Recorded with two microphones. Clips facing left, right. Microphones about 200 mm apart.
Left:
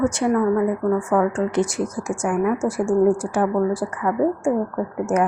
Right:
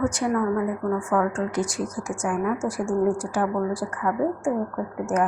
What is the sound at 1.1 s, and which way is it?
Speech, 20° left (ahead or behind).